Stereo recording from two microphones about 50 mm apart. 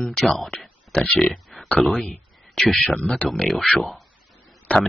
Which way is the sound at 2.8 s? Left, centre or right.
Left.